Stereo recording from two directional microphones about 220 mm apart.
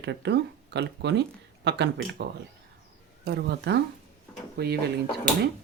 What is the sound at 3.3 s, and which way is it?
Speech, 50° right (ahead or behind).